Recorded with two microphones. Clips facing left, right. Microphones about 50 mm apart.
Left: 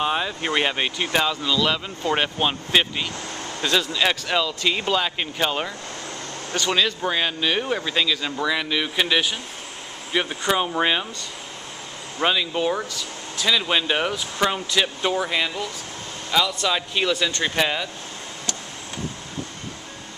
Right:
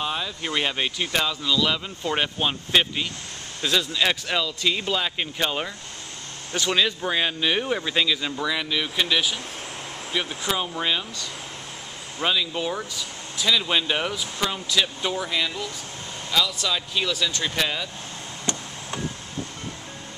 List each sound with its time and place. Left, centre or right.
0.0 s speech: left; by 4.6 s centre
4.6 s speech: centre
6.5 s speech: centre
8.3 s speech: centre; by 11.2 s left
12.2 s speech: centre